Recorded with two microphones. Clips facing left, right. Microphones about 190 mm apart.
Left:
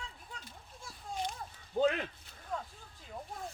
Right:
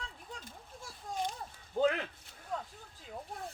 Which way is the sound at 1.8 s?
15° left (ahead or behind).